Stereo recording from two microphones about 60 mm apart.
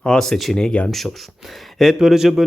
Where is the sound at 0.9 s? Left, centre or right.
Centre.